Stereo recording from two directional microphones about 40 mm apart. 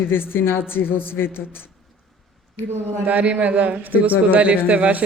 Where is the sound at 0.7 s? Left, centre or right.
Left.